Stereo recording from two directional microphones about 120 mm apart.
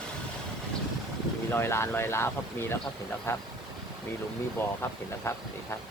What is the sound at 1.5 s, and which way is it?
Speech, 20° left (ahead or behind).